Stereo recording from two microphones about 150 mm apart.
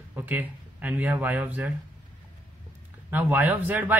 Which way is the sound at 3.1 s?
10° right (ahead or behind).